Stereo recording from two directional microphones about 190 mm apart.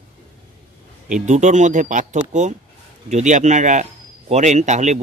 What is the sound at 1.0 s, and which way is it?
A man's voice, 40° right (ahead or behind).